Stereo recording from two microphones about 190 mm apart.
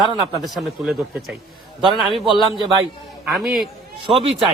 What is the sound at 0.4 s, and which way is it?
Speech, centre (ahead or behind).